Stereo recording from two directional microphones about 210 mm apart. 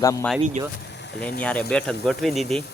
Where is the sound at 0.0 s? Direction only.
15° left (ahead or behind).